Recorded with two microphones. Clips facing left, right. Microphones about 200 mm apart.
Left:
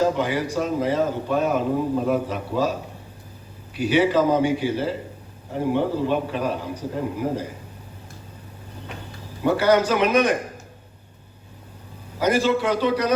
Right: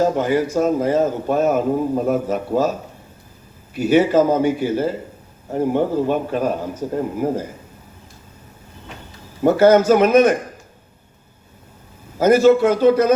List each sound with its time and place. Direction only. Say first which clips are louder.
0.0 s a man's voice: right 4 dB; 45° right (ahead or behind)
3.8 s a man's voice: right 4 dB; 45° right (ahead or behind)
9.4 s a man's voice: right 6 dB; 45° right (ahead or behind)
12.2 s a man's voice: right 8 dB; 45° right (ahead or behind)